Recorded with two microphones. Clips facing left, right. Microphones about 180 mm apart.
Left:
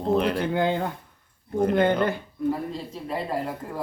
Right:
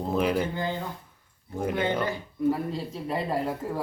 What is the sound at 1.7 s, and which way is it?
Speech, 55° left (ahead or behind).